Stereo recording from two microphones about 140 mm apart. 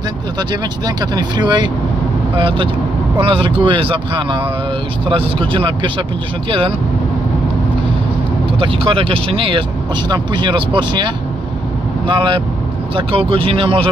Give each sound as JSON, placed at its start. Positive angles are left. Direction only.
{"t": 0.4, "sound": "speech", "side_deg": -30}
{"t": 8.5, "sound": "speech", "side_deg": -40}
{"t": 12.1, "sound": "speech", "side_deg": -35}